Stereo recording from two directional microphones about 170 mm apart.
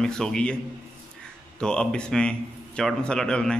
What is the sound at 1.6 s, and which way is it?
A man's voice, 5° left (ahead or behind).